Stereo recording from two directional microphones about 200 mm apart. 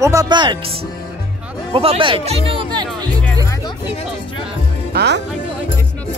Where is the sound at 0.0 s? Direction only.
15° right (ahead or behind).